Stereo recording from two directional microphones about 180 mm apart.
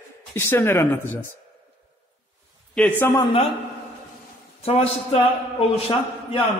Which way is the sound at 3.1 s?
25° left (ahead or behind).